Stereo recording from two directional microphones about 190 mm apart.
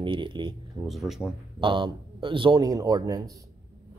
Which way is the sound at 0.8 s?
Centre (ahead or behind).